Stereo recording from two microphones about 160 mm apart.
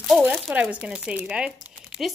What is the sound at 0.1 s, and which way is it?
Speech, centre (ahead or behind).